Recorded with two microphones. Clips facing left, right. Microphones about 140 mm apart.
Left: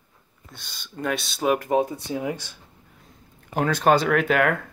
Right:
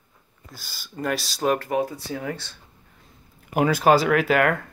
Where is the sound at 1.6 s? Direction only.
20° left (ahead or behind).